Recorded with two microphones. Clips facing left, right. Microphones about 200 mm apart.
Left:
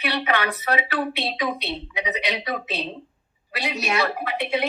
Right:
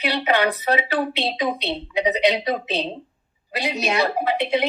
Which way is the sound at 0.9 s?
20° right (ahead or behind).